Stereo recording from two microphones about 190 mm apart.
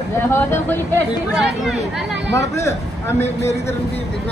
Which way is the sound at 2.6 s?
15° left (ahead or behind).